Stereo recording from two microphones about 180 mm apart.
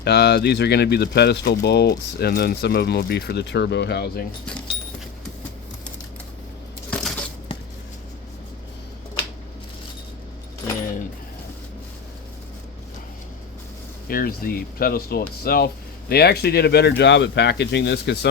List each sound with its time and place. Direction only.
0.0 s speech: 65° left (ahead or behind)
14.1 s speech: 55° left (ahead or behind)
17.0 s speech: 80° left